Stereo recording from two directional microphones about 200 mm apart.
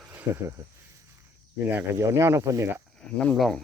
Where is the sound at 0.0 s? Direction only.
10° right (ahead or behind).